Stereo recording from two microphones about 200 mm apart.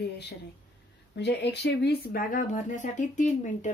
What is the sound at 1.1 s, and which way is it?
Speech, 60° left (ahead or behind).